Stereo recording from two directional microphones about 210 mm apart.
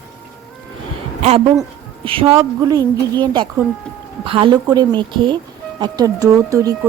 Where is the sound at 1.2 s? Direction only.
30° right (ahead or behind).